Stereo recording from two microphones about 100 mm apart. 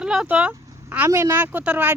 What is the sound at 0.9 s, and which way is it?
Speech, 25° right (ahead or behind).